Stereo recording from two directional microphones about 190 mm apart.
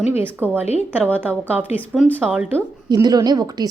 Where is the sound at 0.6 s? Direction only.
35° left (ahead or behind).